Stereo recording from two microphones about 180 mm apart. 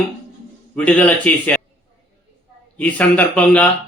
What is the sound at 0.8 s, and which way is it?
Speech, 5° left (ahead or behind).